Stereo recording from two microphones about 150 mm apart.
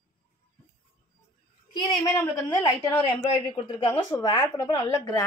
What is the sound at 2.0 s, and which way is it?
A woman's voice, 15° left (ahead or behind).